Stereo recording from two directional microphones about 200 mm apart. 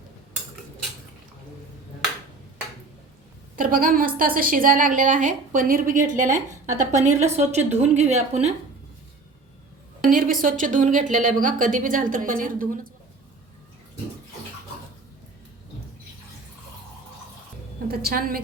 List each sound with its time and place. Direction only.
3.5 s a woman's voice: 45° right (ahead or behind)
10.0 s a woman's voice: 45° right (ahead or behind)
17.8 s a woman's voice: 50° right (ahead or behind)